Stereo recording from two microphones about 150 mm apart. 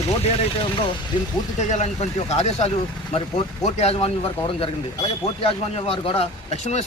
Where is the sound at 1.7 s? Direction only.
45° left (ahead or behind).